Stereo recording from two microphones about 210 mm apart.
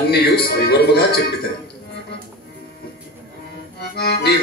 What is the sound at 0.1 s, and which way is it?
Speech, 50° left (ahead or behind).